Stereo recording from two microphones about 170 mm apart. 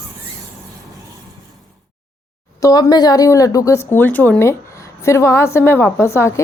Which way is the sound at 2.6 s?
20° left (ahead or behind).